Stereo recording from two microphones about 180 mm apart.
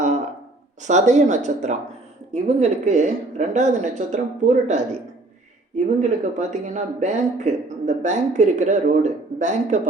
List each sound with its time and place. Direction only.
0.8 s a woman's voice: 40° right (ahead or behind)